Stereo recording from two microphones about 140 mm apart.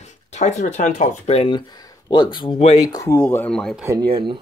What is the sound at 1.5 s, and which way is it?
Speech, 30° left (ahead or behind).